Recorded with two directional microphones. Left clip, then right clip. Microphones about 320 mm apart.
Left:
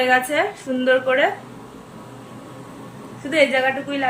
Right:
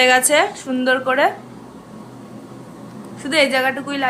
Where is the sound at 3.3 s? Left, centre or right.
Right.